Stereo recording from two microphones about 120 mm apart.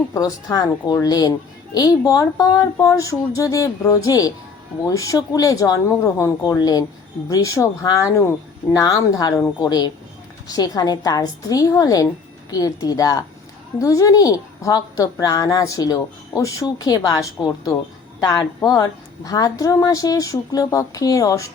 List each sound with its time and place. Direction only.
0.1 s a woman's voice: 30° left (ahead or behind)